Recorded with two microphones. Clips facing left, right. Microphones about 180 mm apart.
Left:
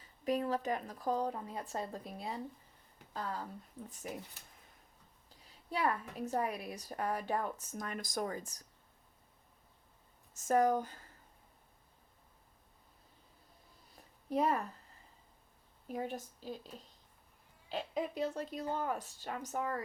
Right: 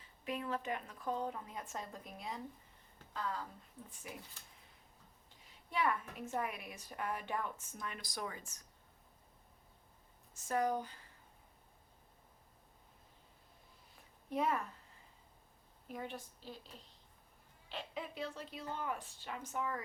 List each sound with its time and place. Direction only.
0.0 s speech: 40° left (ahead or behind)
5.3 s speech: 40° left (ahead or behind)
10.3 s a woman's voice: 45° left (ahead or behind)
13.9 s a sound: 35° left (ahead or behind)
15.9 s a woman's voice: 40° left (ahead or behind)